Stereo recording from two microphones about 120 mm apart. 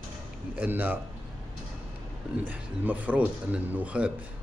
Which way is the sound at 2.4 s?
15° right (ahead or behind).